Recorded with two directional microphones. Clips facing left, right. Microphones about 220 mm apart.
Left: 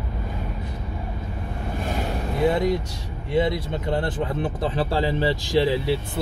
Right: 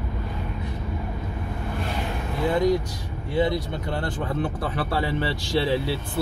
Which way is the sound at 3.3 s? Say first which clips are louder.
Left 1 dB; 20° left (ahead or behind).